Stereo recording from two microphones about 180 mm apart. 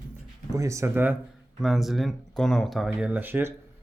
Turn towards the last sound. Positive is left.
turn(degrees=-10)  # may be behind; listen again after turning